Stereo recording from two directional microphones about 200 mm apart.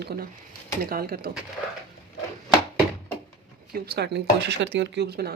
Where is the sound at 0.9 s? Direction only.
45° right (ahead or behind).